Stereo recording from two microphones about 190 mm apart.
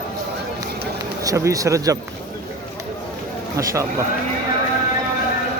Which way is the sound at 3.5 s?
15° right (ahead or behind).